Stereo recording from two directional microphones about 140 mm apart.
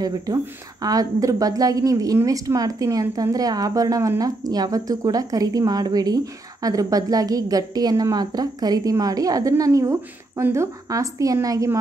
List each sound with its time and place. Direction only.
0.8 s speech: 25° right (ahead or behind)